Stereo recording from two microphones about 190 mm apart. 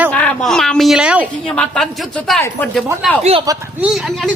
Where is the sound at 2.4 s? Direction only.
10° left (ahead or behind).